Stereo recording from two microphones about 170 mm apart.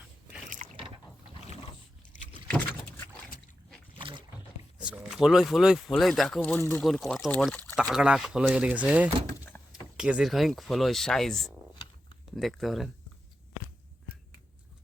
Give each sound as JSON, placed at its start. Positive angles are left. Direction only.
{"t": 0.6, "sound": "boat", "side_deg": -45}
{"t": 4.8, "sound": "speech", "side_deg": -5}
{"t": 6.6, "sound": "speech", "side_deg": 15}
{"t": 6.8, "sound": "speech", "side_deg": 0}
{"t": 7.8, "sound": "speech", "side_deg": -5}